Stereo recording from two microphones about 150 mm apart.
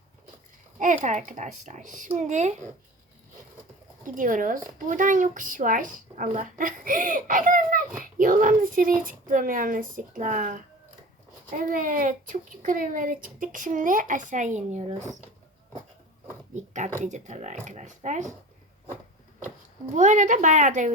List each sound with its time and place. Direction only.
1.0 s speech: 55° right (ahead or behind)
4.0 s speech: 60° right (ahead or behind)
17.0 s speech: 55° right (ahead or behind)
20.0 s speech: 55° right (ahead or behind)